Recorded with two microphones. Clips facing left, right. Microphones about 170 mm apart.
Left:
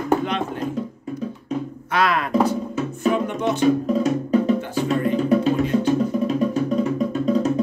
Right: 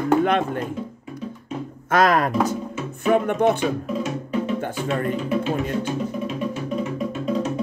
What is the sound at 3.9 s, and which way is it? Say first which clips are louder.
Music: left 7 dB; 40° left (ahead or behind).